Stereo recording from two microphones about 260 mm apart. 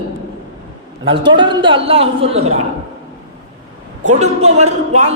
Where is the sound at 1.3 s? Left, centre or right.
Centre.